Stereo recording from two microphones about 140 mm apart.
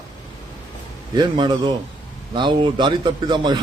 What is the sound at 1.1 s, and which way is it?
A man's voice, 35° right (ahead or behind).